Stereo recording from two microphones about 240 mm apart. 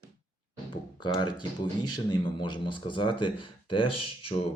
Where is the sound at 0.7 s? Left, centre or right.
Centre.